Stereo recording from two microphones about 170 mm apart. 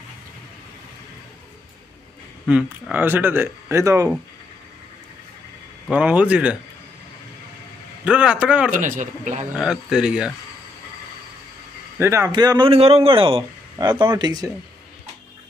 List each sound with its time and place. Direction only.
2.4 s speech: 10° right (ahead or behind)
5.9 s speech: 10° right (ahead or behind)
8.0 s speech: 5° right (ahead or behind)
8.8 s speech: 50° right (ahead or behind)
9.6 s speech: 5° right (ahead or behind)
12.0 s a man's voice: 15° right (ahead or behind)